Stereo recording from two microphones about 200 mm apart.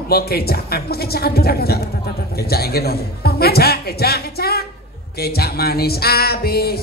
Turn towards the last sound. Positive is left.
turn(degrees=50)  # may be behind; listen again after turning